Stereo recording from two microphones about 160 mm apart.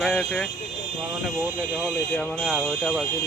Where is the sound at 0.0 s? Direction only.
5° left (ahead or behind).